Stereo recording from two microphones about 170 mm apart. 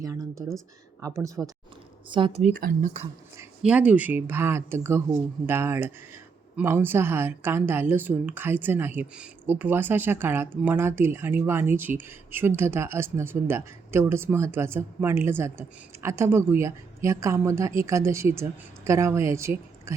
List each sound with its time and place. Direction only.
0.0 s speech: 20° right (ahead or behind)
2.4 s speech: 55° right (ahead or behind)
3.6 s speech: 5° right (ahead or behind)